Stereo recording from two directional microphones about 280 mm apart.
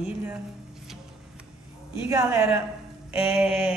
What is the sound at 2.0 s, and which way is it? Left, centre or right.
A woman's voice, centre.